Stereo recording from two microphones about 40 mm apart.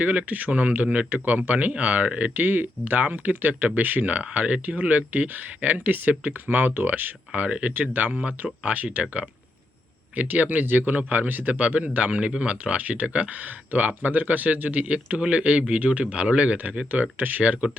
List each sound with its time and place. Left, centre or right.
0.0 s speech: right
4.2 s speech: right
7.3 s speech: right
7.7 s speech: right
16.6 s speech: right
17.4 s speech: right